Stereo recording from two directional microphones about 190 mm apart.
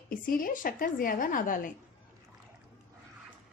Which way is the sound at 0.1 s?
50° left (ahead or behind).